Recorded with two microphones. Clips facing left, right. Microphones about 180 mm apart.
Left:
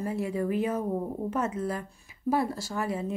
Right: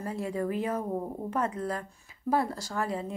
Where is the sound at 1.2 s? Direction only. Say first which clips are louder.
Even; 20° left (ahead or behind).